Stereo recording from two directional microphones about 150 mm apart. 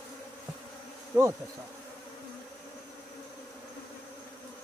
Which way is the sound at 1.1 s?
25° right (ahead or behind).